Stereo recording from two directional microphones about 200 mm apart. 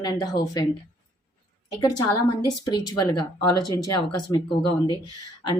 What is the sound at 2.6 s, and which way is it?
Speech, 20° left (ahead or behind).